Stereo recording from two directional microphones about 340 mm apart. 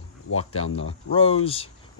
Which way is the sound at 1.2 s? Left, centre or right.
Centre.